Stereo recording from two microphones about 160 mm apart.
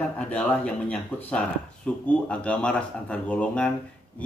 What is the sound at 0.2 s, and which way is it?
Speech, 10° left (ahead or behind).